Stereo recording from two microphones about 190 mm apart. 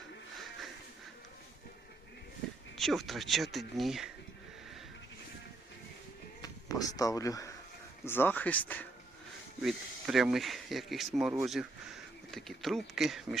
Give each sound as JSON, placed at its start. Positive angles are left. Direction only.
{"t": 2.7, "sound": "speech", "side_deg": 0}
{"t": 6.4, "sound": "speech", "side_deg": 20}